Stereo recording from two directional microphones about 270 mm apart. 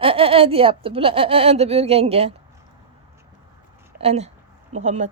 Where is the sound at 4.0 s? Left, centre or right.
Right.